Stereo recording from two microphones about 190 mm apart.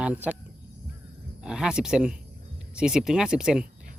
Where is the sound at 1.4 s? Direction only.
5° right (ahead or behind).